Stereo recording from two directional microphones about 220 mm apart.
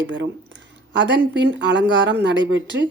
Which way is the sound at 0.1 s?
55° right (ahead or behind).